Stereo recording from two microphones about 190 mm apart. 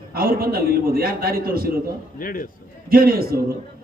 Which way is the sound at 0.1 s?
50° right (ahead or behind).